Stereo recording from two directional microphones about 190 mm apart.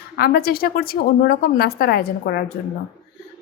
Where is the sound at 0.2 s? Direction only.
50° left (ahead or behind).